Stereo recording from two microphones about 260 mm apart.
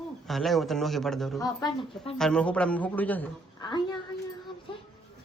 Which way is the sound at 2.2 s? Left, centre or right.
Centre.